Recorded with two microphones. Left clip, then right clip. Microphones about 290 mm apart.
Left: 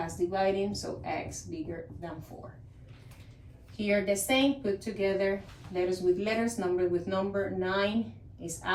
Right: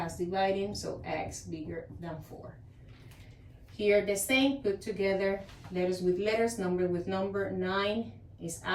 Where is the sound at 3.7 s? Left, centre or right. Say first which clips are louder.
Right 2 dB; centre.